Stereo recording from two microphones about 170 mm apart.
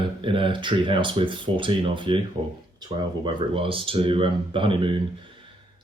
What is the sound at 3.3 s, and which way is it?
Speech, 30° right (ahead or behind).